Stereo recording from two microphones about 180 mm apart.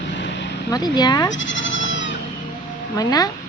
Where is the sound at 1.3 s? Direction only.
90° left.